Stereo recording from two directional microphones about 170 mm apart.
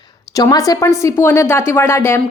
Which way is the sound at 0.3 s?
20° left (ahead or behind).